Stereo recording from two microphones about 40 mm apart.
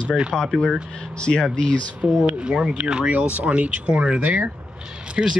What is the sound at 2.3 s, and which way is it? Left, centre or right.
Speech, right.